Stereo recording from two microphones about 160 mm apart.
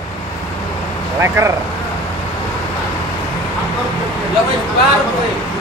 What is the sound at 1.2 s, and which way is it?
Speech, 15° right (ahead or behind).